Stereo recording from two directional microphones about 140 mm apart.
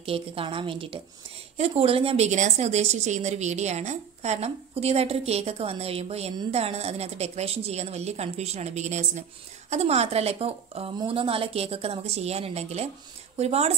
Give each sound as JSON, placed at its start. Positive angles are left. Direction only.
{"t": 0.0, "sound": "a woman's voice", "side_deg": -40}